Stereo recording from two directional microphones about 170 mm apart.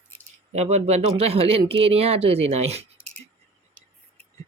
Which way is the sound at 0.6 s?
40° right (ahead or behind).